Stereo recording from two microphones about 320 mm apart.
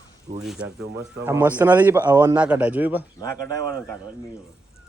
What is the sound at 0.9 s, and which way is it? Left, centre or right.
Speech, right.